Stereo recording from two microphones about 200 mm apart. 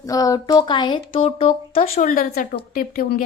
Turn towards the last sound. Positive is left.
turn(degrees=45)  # may be behind; listen again after turning